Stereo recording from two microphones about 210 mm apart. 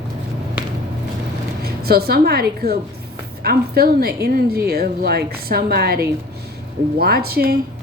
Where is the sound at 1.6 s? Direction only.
45° right (ahead or behind).